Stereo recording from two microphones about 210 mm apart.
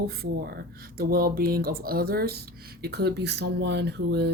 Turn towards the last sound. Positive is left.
turn(degrees=-50)  # may be behind; listen again after turning